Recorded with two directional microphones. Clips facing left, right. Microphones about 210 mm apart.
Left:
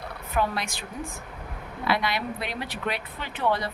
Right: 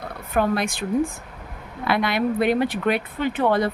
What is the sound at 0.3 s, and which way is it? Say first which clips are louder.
Speech: right 6 dB; 50° right (ahead or behind).